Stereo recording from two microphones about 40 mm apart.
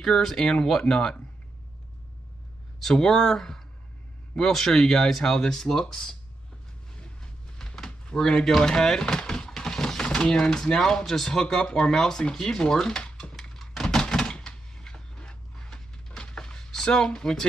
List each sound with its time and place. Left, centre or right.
0.0 s speech: centre
2.8 s speech: centre
7.0 s vehicle: left
8.2 s a sound: centre
10.0 s speech: left
11.4 s speech: left
13.4 s a sound: centre